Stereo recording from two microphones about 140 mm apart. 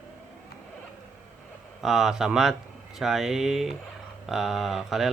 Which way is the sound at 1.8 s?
5° right (ahead or behind).